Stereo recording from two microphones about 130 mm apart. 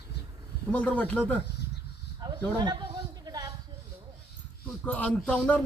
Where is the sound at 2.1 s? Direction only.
35° right (ahead or behind).